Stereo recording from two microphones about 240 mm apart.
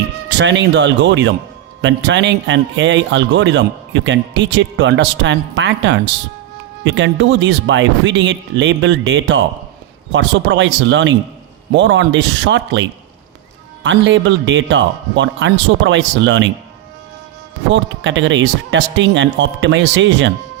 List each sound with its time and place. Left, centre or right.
0.3 s speech: right
13.8 s speech: right
17.7 s speech: right